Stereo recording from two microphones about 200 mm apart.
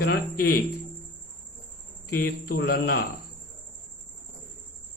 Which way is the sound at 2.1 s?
50° left (ahead or behind).